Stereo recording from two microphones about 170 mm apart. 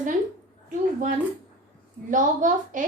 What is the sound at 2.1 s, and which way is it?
Speech, 50° right (ahead or behind).